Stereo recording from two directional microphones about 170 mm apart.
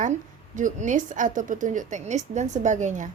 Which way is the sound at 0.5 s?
50° right (ahead or behind).